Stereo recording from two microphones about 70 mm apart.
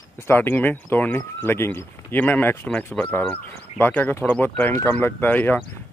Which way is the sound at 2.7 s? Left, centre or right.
Centre.